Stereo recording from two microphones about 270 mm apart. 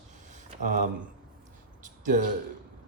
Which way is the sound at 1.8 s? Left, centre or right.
Right.